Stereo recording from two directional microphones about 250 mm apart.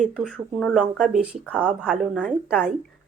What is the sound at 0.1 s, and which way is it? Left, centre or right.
Speech, centre.